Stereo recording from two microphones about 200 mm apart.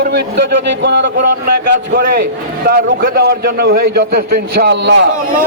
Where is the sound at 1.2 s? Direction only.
45° right (ahead or behind).